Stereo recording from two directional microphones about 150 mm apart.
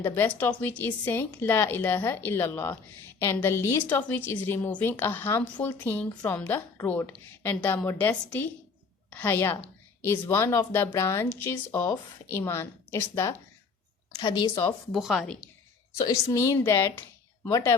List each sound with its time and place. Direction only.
0.0 s a woman's voice: 15° left (ahead or behind)
14.2 s a woman's voice: 30° left (ahead or behind)
14.9 s a woman's voice: centre (ahead or behind)
16.0 s a woman's voice: 20° left (ahead or behind)